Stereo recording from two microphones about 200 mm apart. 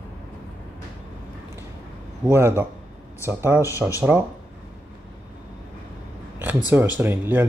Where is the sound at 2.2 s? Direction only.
10° right (ahead or behind).